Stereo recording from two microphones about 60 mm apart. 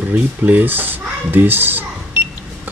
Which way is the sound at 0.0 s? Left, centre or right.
Right.